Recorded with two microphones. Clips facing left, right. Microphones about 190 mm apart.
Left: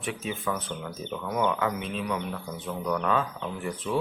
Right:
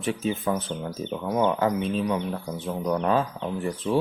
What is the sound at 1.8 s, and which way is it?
Speech, 35° right (ahead or behind).